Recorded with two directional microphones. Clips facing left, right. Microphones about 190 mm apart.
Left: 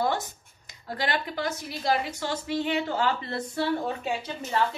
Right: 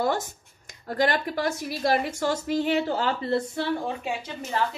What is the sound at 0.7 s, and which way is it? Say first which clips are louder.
Speech: right 6 dB; 45° right (ahead or behind).